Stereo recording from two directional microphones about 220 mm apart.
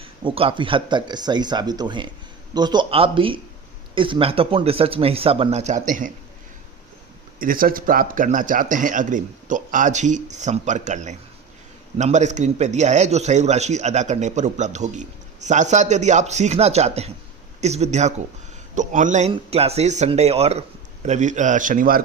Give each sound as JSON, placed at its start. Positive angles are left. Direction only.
{"t": 0.0, "sound": "speech", "side_deg": -25}
{"t": 7.3, "sound": "a man's voice", "side_deg": -40}